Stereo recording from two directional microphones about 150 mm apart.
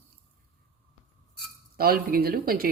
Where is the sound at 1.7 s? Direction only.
90° right.